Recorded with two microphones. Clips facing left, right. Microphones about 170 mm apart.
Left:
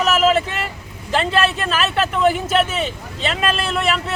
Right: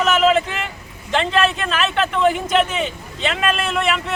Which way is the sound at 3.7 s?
Centre (ahead or behind).